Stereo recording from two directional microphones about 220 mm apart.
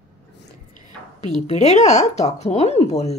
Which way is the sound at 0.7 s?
30° left (ahead or behind).